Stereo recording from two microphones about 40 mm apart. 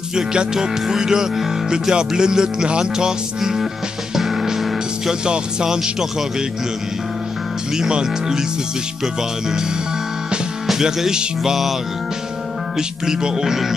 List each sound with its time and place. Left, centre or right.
0.1 s speech: centre
4.2 s music: centre
5.2 s speech: centre
7.9 s speech: centre
10.7 s speech: centre
12.7 s speech: centre